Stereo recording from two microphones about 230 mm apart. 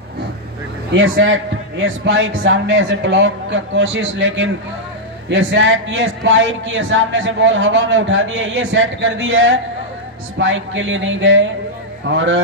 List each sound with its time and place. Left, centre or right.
0.9 s a man's voice: right